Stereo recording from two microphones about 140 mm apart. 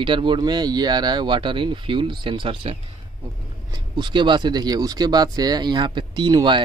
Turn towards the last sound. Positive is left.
turn(degrees=-30)  # may be behind; listen again after turning